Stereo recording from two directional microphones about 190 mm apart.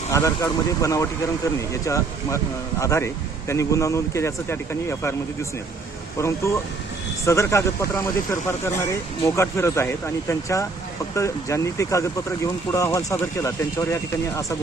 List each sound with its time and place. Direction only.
0.1 s speech: 15° left (ahead or behind)